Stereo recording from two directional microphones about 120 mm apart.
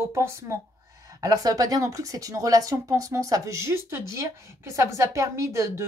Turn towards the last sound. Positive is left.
turn(degrees=-25)  # may be behind; listen again after turning